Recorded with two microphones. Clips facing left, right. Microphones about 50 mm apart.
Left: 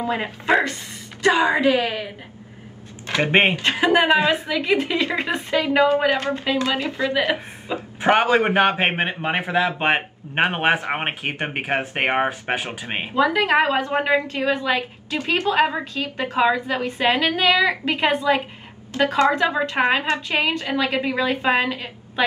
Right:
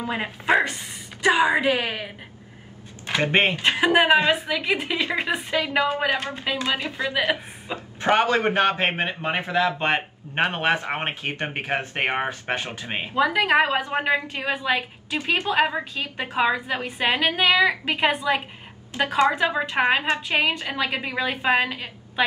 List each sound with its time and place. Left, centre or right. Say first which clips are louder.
0.1 s a woman's voice: left 1 dB; centre
1.2 s a woman's voice: left 2 dB; centre
3.2 s speech: left 3 dB; left
3.7 s a woman's voice: even; centre
7.7 s a man's voice: left 3 dB; centre
13.1 s a woman's voice: left 2 dB; centre
14.2 s a woman's voice: left 4 dB; centre
18.9 s a woman's voice: left 2 dB; centre